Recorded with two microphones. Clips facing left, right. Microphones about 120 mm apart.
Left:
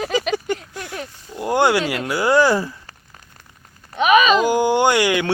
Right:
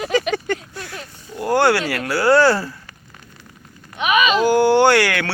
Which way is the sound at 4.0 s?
35° left (ahead or behind).